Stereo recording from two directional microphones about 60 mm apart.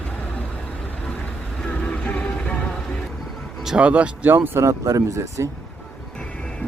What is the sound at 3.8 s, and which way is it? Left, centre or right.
Speech, right.